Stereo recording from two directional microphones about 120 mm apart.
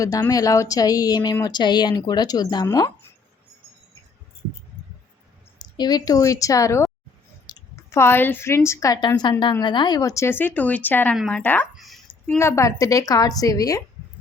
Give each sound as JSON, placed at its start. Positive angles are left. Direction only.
{"t": 0.0, "sound": "speech", "side_deg": 30}
{"t": 5.5, "sound": "speech", "side_deg": 35}
{"t": 7.4, "sound": "clicking", "side_deg": 35}
{"t": 7.9, "sound": "speech", "side_deg": 20}
{"t": 9.0, "sound": "speech", "side_deg": 35}
{"t": 11.7, "sound": "a sound", "side_deg": 0}
{"t": 12.2, "sound": "speech", "side_deg": 20}